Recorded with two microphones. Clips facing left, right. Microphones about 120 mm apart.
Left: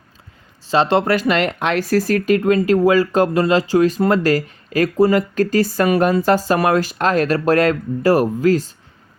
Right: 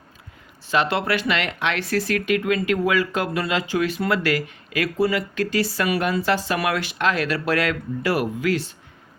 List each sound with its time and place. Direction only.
0.7 s speech: 35° left (ahead or behind)